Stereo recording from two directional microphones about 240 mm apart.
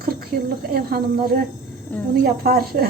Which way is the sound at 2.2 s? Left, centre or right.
Right.